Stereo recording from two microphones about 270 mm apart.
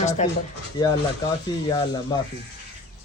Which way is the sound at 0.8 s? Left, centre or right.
Centre.